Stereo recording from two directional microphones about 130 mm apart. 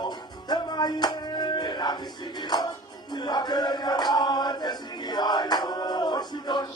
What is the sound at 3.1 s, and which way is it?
Male singing, 35° left (ahead or behind).